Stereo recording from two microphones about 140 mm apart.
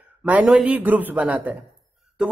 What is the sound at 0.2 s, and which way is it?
A woman's voice, 10° right (ahead or behind).